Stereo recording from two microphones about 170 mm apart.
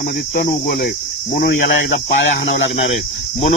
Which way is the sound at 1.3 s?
75° left (ahead or behind).